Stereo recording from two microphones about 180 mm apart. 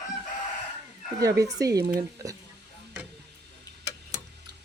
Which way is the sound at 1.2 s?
20° right (ahead or behind).